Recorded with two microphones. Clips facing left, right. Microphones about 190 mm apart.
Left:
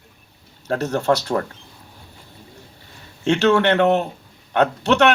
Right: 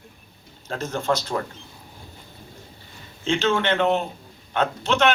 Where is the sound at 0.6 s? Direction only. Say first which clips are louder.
Left 6 dB; 65° left (ahead or behind).